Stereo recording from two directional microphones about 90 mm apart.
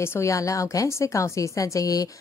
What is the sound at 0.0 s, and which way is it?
A woman's voice, 30° left (ahead or behind).